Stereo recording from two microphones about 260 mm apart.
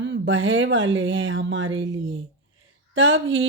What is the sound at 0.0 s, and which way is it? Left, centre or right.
Speech, right.